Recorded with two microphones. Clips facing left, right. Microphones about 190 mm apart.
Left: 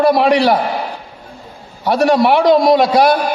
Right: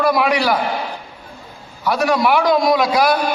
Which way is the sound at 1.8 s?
30° left (ahead or behind).